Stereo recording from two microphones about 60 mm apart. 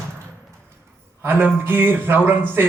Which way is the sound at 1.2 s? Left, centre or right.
Right.